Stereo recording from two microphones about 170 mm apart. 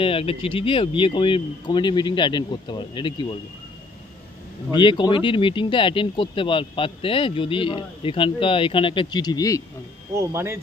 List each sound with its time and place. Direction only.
0.0 s speech: 35° left (ahead or behind)
4.7 s speech: 25° left (ahead or behind)
10.1 s speech: 15° right (ahead or behind)